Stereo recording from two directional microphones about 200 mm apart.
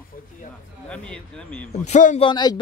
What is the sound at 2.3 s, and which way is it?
Speech, 20° left (ahead or behind).